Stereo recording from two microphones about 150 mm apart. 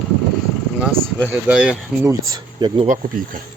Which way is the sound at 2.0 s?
25° right (ahead or behind).